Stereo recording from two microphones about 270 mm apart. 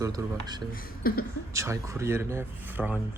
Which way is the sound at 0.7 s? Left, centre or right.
Left.